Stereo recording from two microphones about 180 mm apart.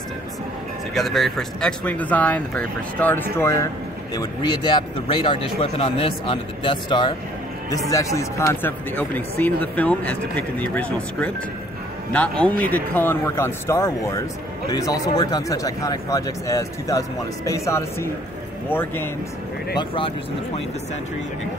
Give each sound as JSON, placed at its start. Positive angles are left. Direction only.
{"t": 0.9, "sound": "speech", "side_deg": 0}
{"t": 19.8, "sound": "speech", "side_deg": 30}